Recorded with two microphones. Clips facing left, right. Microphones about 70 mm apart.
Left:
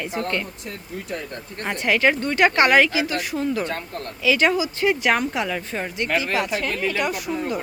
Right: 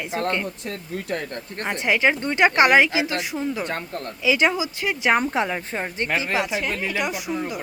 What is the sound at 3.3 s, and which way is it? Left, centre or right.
A woman's voice, centre.